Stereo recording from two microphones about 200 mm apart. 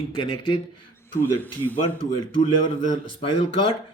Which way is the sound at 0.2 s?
20° left (ahead or behind).